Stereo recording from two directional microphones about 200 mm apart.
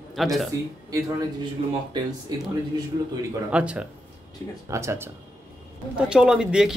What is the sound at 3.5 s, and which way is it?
Speech, 5° right (ahead or behind).